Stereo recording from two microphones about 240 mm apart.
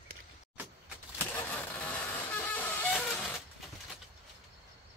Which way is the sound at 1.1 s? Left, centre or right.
Centre.